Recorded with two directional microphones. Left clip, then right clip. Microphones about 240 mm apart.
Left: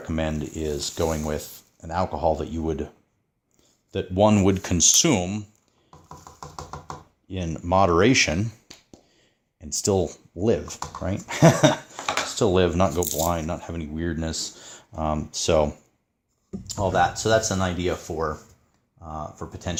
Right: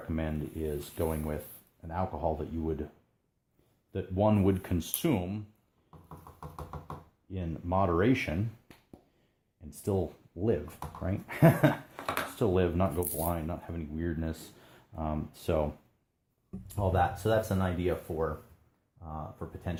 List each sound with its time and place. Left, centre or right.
0.1 s speech: left
3.9 s speech: left
7.3 s speech: left
9.6 s speech: left
16.6 s speech: left